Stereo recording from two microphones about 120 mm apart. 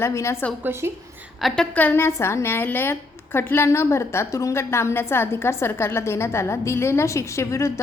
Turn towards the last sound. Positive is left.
turn(degrees=25)  # may be behind; listen again after turning